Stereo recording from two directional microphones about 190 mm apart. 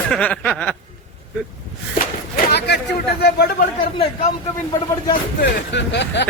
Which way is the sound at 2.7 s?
60° left (ahead or behind).